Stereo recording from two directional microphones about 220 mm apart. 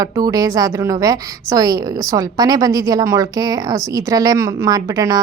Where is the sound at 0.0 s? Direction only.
15° right (ahead or behind).